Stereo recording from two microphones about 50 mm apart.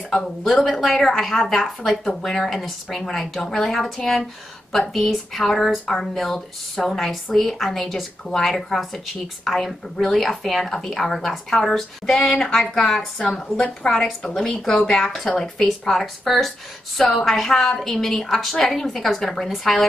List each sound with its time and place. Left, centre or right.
0.5 s speech: centre
13.2 s a woman's voice: centre
14.9 s speech: centre